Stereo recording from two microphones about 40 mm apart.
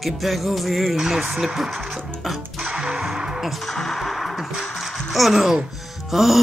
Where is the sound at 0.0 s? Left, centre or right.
Centre.